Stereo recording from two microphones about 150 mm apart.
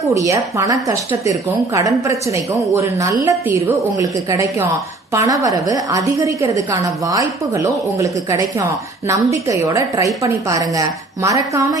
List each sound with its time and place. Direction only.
0.0 s a woman's voice: 20° right (ahead or behind)